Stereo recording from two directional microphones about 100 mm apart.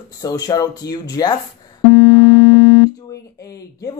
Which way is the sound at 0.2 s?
35° left (ahead or behind).